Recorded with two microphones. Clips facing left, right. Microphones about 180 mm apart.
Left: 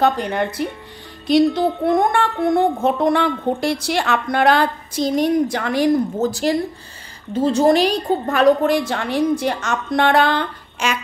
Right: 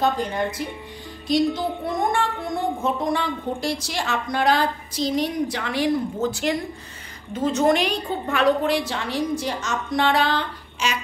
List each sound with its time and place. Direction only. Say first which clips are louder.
0.0 s a woman's voice: left 4 dB; 65° left (ahead or behind)